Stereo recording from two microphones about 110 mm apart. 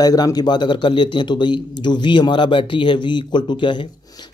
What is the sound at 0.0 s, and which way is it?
A man's voice, 35° left (ahead or behind).